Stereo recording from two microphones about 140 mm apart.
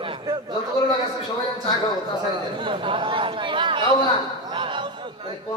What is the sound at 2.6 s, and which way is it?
Chatter, 35° right (ahead or behind).